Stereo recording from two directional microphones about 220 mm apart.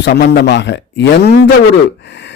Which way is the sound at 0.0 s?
50° left (ahead or behind).